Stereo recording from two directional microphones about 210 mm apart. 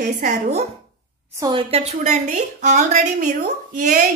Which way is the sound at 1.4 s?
25° right (ahead or behind).